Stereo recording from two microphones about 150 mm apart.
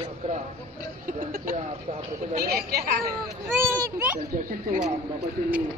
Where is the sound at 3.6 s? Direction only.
15° right (ahead or behind).